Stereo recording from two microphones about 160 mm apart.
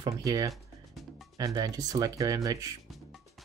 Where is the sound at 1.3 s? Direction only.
20° right (ahead or behind).